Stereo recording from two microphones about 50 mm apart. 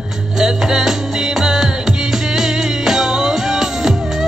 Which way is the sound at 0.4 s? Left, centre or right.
Centre.